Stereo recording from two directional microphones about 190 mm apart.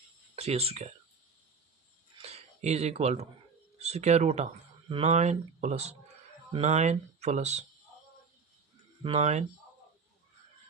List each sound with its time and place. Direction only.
0.3 s speech: 30° right (ahead or behind)
2.2 s speech: 35° right (ahead or behind)
9.0 s speech: 35° right (ahead or behind)